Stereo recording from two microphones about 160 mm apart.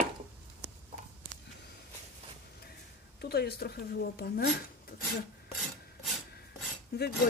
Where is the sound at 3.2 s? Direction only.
80° left.